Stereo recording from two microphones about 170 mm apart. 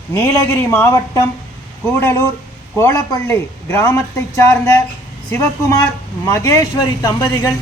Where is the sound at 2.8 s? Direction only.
15° left (ahead or behind).